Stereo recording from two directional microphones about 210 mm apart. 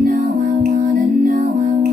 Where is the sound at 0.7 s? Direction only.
35° right (ahead or behind).